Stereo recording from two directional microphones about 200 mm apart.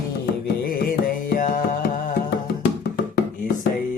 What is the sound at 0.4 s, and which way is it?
Music, 50° left (ahead or behind).